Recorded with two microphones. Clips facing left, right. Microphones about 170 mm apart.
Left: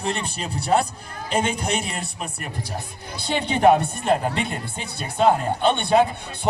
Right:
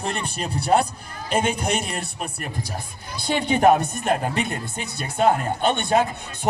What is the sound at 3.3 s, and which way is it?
A man's voice, 45° right (ahead or behind).